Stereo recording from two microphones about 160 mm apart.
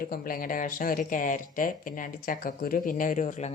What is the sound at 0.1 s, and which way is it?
Speech, 65° left (ahead or behind).